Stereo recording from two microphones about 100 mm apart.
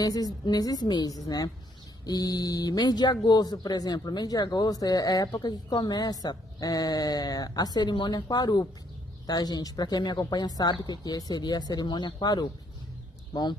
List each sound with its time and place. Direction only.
0.0 s a woman's voice: 40° left (ahead or behind)